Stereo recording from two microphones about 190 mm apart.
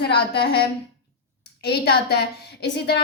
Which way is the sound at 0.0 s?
60° left (ahead or behind).